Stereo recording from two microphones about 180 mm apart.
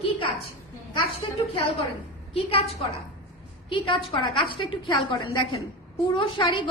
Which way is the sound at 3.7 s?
30° left (ahead or behind).